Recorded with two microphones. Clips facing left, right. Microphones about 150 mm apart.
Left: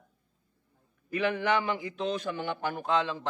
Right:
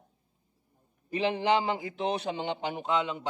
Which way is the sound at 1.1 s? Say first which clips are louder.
Right 1 dB; 20° right (ahead or behind).